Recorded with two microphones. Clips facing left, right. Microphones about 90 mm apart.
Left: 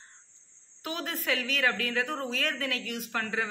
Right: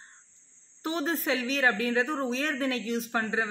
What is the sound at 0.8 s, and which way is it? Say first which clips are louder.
A woman's voice: right 4 dB; 30° right (ahead or behind).